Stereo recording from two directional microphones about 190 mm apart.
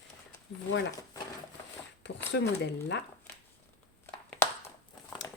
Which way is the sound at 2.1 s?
70° left (ahead or behind).